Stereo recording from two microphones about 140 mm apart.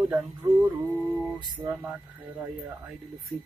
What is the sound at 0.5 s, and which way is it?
Mantra, 25° right (ahead or behind).